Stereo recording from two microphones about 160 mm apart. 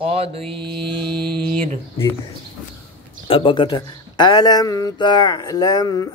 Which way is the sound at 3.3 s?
35° left (ahead or behind).